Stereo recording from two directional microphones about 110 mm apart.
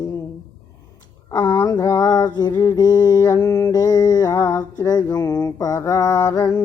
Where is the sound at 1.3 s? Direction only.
35° left (ahead or behind).